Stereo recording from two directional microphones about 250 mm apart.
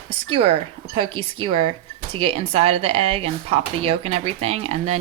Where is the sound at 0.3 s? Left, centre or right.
Right.